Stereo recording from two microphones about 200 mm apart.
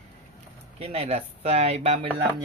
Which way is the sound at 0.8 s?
30° right (ahead or behind).